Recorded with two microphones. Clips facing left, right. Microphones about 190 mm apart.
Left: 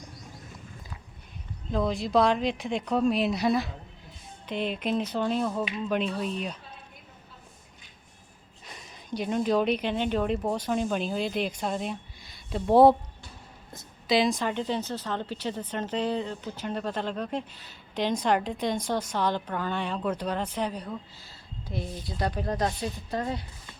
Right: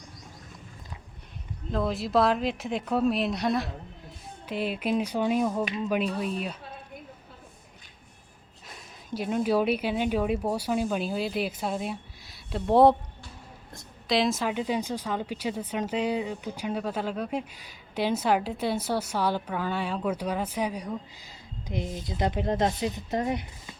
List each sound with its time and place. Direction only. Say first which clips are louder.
1.7 s a woman's voice: left 1 dB; centre (ahead or behind)
8.6 s a woman's voice: left 1 dB; centre (ahead or behind); by 23.7 s 20° right (ahead or behind)